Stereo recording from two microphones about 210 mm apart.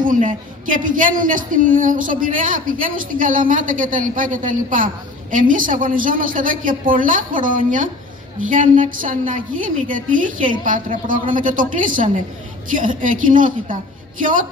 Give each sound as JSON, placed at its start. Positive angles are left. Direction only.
{"t": 0.0, "sound": "a woman's voice", "side_deg": -40}